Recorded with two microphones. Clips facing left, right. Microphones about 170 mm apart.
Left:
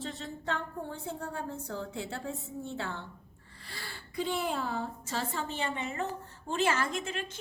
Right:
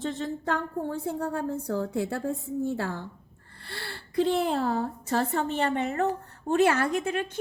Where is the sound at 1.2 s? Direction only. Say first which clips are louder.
Right 8 dB; 50° right (ahead or behind).